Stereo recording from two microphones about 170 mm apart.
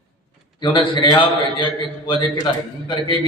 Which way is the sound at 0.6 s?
30° left (ahead or behind).